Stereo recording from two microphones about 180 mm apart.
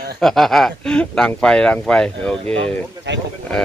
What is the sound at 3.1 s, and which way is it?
Speech, 75° right (ahead or behind).